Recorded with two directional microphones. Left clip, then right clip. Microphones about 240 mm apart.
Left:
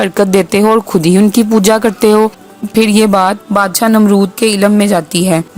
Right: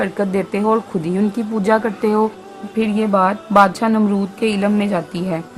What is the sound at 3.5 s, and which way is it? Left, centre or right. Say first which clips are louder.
A woman's voice: left 2 dB; left.